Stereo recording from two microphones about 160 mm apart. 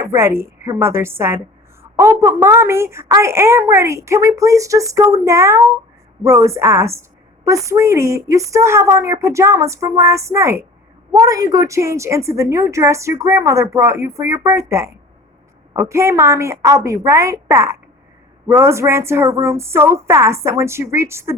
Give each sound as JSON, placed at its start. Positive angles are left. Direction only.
{"t": 0.0, "sound": "a woman's voice", "side_deg": -15}